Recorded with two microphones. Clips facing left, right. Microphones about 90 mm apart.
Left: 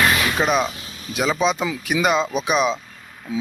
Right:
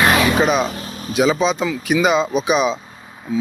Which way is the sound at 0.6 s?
40° right (ahead or behind).